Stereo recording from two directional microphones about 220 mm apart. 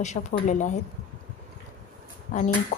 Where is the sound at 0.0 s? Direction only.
30° left (ahead or behind).